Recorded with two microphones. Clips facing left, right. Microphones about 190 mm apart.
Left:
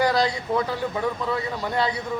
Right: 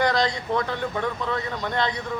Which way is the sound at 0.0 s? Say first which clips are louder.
Left 1 dB; 10° left (ahead or behind).